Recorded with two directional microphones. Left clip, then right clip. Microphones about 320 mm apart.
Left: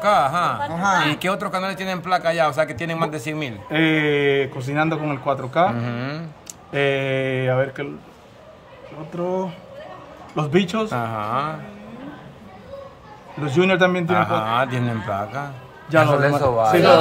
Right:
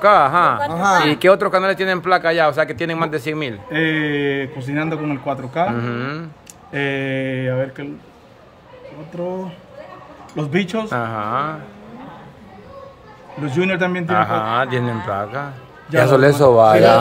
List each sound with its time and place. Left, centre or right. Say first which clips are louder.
0.0 s speech: right 6 dB; centre
0.6 s speech: right 4 dB; right
1.1 s a man's voice: right 10 dB; centre
3.7 s a man's voice: left 1 dB; centre
10.3 s a man's voice: even; centre
13.5 s a man's voice: left 2 dB; centre
16.2 s a man's voice: right 6 dB; right